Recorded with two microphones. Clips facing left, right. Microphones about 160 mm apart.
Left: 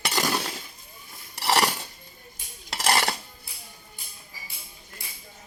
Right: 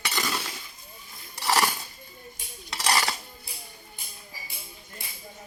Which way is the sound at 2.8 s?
50° left (ahead or behind).